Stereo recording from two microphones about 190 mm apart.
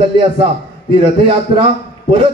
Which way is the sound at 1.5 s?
30° right (ahead or behind).